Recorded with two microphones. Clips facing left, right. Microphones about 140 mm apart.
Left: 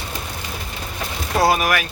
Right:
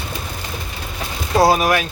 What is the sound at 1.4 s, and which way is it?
Vehicle, 25° right (ahead or behind).